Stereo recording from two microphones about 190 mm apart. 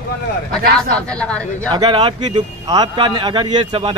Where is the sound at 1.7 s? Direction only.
25° right (ahead or behind).